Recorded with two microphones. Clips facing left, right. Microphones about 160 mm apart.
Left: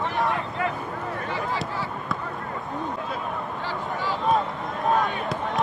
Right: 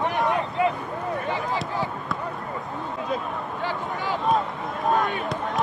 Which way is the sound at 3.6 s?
15° right (ahead or behind).